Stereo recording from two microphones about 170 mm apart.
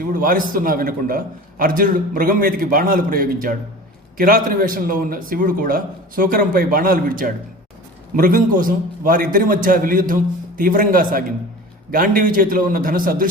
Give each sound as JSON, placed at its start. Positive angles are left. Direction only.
{"t": 0.1, "sound": "a man's voice", "side_deg": -55}